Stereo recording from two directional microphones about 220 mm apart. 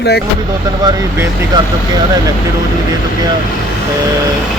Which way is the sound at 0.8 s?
15° right (ahead or behind).